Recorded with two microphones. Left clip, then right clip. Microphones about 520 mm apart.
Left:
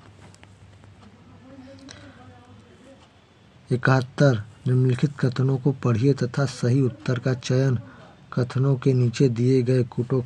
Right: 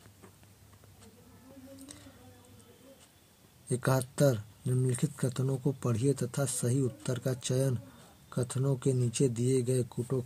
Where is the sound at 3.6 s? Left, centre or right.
Right.